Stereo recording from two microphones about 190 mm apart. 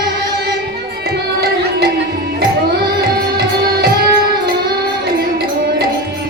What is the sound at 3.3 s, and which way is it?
Music, 60° right (ahead or behind).